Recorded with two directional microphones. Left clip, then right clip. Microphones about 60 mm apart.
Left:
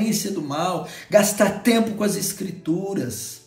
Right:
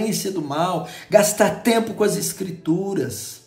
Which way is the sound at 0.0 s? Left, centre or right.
Right.